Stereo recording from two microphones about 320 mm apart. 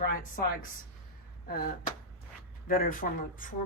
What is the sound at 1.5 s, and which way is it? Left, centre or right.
Speech, left.